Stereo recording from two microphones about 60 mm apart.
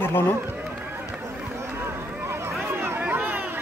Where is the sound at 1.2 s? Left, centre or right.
Right.